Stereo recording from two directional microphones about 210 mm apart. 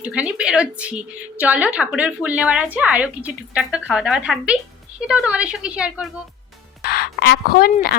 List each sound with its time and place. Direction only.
0.0 s a woman's voice: 5° right (ahead or behind)
6.8 s speech: 50° left (ahead or behind)